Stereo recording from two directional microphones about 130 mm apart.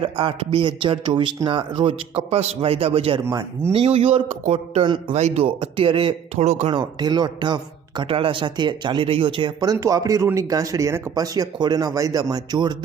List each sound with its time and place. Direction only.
0.0 s a man's voice: 40° right (ahead or behind)
3.2 s speech: 20° right (ahead or behind)
3.7 s a man's voice: 50° right (ahead or behind)
4.8 s a man's voice: 40° right (ahead or behind)
5.1 s a man's voice: 55° right (ahead or behind)
5.5 s a man's voice: 40° right (ahead or behind)
6.4 s speech: 60° right (ahead or behind)
6.7 s a man's voice: 35° right (ahead or behind)